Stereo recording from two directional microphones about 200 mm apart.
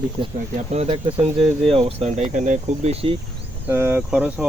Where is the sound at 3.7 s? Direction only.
10° right (ahead or behind).